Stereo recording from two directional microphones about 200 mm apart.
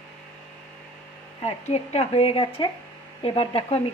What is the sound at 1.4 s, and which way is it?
Speech, 30° left (ahead or behind).